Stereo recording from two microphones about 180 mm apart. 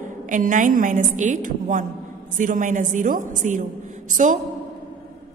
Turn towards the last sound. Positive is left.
turn(degrees=-45)  # may be behind; listen again after turning